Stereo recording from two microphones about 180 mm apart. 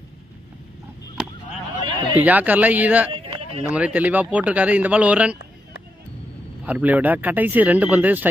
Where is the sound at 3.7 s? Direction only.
5° right (ahead or behind).